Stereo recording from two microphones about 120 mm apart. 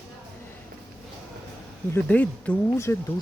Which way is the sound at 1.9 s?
15° left (ahead or behind).